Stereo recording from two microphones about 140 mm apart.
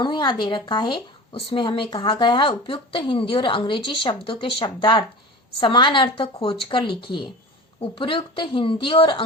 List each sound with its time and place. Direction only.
0.0 s speech: 35° left (ahead or behind)